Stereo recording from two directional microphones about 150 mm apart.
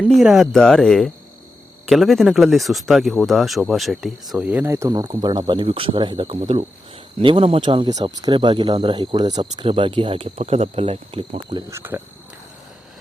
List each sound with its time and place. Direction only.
0.0 s speech: centre (ahead or behind); by 11.6 s 35° right (ahead or behind)
11.7 s speech: 15° right (ahead or behind)